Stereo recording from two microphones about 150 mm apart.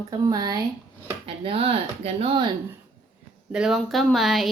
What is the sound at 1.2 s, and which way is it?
Speech, 40° right (ahead or behind).